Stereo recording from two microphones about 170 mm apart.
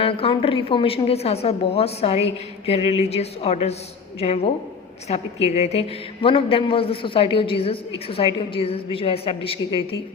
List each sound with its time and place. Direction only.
0.0 s a woman's voice: 30° left (ahead or behind)